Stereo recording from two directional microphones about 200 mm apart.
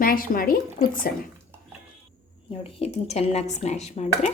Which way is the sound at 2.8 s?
30° left (ahead or behind).